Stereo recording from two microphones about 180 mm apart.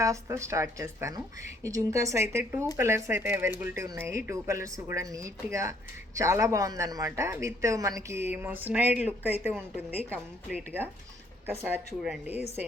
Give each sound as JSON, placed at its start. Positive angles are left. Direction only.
{"t": 0.0, "sound": "a man's voice", "side_deg": -15}
{"t": 12.0, "sound": "a woman's voice", "side_deg": -5}
{"t": 12.4, "sound": "a woman's voice", "side_deg": 35}